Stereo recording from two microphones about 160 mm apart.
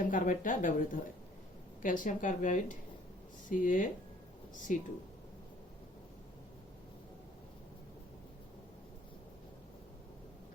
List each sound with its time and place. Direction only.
0.0 s speech: 55° left (ahead or behind)